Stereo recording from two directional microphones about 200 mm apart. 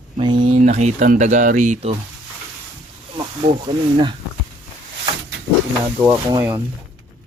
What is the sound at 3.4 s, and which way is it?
Speech, 30° right (ahead or behind).